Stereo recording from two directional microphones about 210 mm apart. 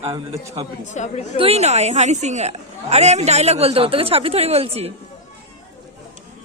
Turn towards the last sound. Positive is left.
turn(degrees=-30)  # may be behind; listen again after turning